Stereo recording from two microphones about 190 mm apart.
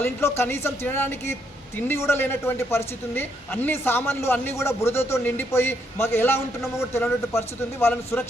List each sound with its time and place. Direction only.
0.0 s speech: 10° left (ahead or behind)